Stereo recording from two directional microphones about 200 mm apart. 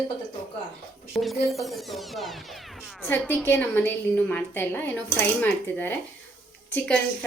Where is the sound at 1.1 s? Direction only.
Centre (ahead or behind).